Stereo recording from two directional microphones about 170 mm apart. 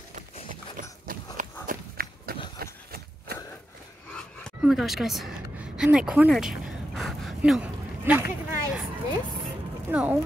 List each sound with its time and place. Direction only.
0.1 s horse: 50° right (ahead or behind)
2.6 s a sound: 70° right (ahead or behind)
4.6 s a woman's voice: centre (ahead or behind)
7.0 s gasp: centre (ahead or behind)
8.0 s speech: 15° right (ahead or behind)
9.8 s speech: 10° right (ahead or behind)